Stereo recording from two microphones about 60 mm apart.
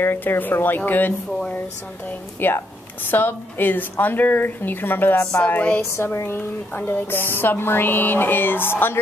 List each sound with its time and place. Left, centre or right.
0.0 s a woman's voice: left
2.4 s a woman's voice: left
5.4 s a woman's voice: left
6.1 s a woman's voice: left